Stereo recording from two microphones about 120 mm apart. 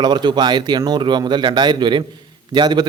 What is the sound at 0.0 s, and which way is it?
Speech, 40° right (ahead or behind).